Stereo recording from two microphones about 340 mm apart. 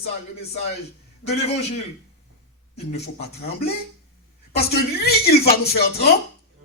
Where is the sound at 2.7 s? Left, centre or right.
Left.